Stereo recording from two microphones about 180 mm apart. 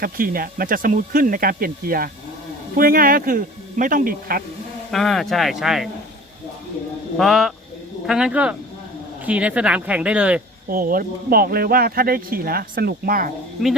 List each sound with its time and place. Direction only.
0.0 s speech: 55° right (ahead or behind)
4.9 s speech: centre (ahead or behind)
7.2 s speech: centre (ahead or behind)
10.7 s speech: 50° right (ahead or behind)
13.6 s speech: centre (ahead or behind)